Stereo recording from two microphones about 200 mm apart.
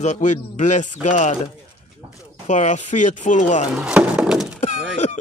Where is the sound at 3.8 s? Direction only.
5° right (ahead or behind).